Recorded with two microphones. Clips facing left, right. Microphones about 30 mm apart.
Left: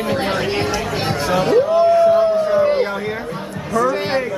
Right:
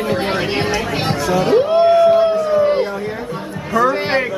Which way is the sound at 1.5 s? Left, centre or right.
Right.